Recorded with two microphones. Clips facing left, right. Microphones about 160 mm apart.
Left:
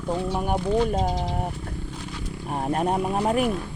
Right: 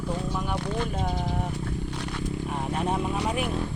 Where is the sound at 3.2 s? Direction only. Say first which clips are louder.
Left 6 dB; 45° left (ahead or behind).